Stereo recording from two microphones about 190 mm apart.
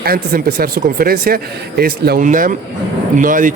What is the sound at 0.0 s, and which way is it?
Speech, 50° right (ahead or behind).